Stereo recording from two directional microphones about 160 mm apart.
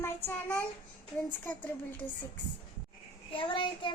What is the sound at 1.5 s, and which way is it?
Speech, 10° left (ahead or behind).